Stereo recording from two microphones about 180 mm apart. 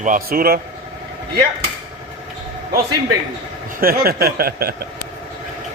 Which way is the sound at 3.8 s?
55° right (ahead or behind).